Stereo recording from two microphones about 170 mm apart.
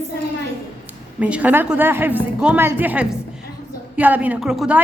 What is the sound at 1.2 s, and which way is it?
A woman's voice, 10° right (ahead or behind).